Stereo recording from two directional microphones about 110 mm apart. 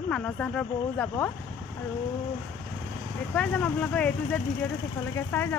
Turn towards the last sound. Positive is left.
turn(degrees=20)  # may be behind; listen again after turning